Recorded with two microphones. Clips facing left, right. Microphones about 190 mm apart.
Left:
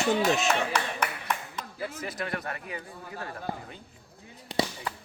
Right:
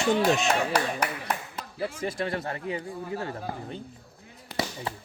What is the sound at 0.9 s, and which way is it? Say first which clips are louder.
Clapping: right 2 dB; 35° right (ahead or behind).